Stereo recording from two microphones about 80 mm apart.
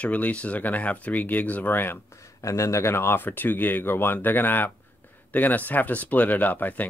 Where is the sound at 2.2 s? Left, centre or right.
Left.